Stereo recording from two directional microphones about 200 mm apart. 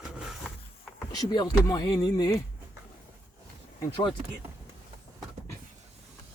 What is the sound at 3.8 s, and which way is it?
Speech, 20° left (ahead or behind).